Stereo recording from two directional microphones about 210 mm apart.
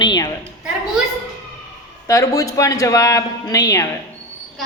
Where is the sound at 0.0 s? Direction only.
20° left (ahead or behind).